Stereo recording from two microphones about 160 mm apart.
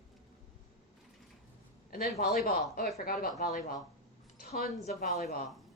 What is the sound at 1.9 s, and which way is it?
A woman's voice, 70° left (ahead or behind).